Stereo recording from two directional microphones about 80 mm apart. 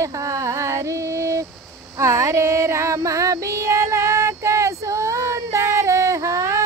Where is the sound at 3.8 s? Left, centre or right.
Right.